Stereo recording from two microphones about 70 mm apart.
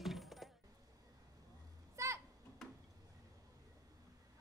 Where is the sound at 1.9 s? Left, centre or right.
Right.